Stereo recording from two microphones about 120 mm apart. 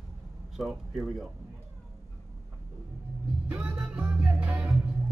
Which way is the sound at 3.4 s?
10° right (ahead or behind).